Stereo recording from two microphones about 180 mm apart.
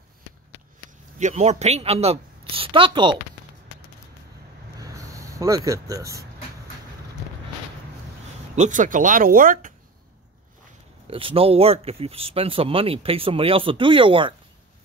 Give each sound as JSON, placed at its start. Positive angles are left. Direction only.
{"t": 1.2, "sound": "a woman's voice", "side_deg": -40}
{"t": 4.7, "sound": "vehicle", "side_deg": -20}
{"t": 8.5, "sound": "speech", "side_deg": -45}
{"t": 11.1, "sound": "speech", "side_deg": -30}